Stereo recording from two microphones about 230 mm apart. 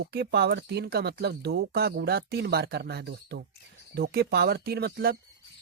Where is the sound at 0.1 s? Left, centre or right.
Right.